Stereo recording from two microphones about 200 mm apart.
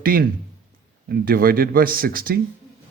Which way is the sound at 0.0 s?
45° right (ahead or behind).